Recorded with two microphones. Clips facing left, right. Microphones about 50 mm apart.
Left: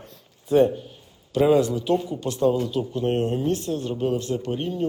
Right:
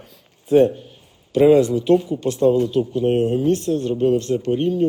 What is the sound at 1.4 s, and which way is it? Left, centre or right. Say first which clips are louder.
Speech: right 5 dB; centre.